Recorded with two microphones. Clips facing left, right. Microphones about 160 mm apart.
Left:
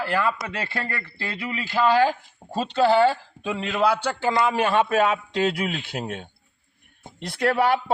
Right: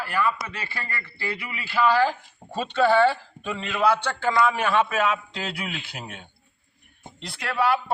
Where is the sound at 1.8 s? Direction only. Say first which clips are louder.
Left 1 dB; 35° left (ahead or behind).